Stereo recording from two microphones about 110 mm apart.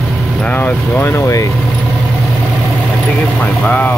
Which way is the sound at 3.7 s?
15° left (ahead or behind).